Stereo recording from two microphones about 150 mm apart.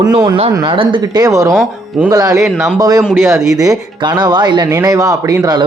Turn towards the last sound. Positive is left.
turn(degrees=-25)  # may be behind; listen again after turning